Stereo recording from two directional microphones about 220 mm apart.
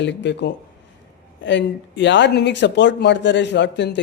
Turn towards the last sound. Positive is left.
turn(degrees=55)  # may be behind; listen again after turning